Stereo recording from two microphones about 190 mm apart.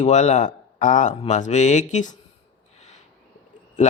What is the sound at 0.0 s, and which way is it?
Speech, 40° left (ahead or behind).